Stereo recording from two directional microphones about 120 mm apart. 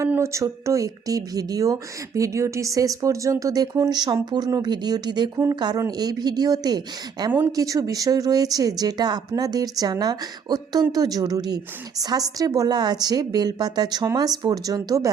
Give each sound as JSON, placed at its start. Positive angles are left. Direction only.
{"t": 0.1, "sound": "speech", "side_deg": -25}